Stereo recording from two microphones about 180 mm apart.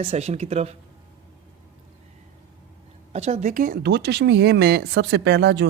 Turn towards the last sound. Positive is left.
turn(degrees=-70)  # may be behind; listen again after turning